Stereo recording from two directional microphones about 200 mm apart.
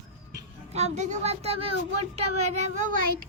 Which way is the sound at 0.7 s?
35° right (ahead or behind).